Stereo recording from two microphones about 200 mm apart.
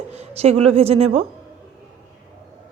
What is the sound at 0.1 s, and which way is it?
A woman's voice, 30° right (ahead or behind).